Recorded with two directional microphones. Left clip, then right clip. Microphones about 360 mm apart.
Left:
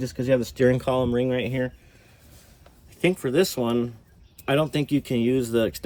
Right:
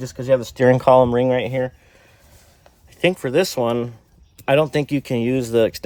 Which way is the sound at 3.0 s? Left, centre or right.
Right.